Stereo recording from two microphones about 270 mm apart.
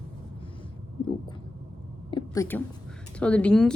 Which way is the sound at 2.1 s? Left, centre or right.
Centre.